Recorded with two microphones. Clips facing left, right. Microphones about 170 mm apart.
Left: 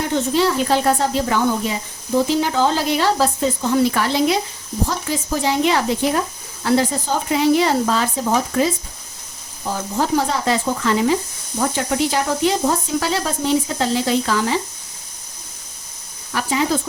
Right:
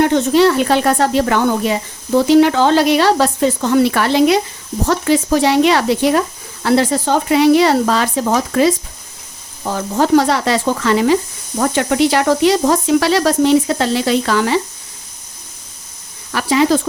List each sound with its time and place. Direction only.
0.0 s speech: 70° right (ahead or behind)
16.3 s speech: 80° right